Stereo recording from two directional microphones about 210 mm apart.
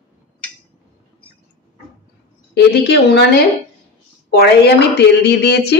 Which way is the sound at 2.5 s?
50° left (ahead or behind).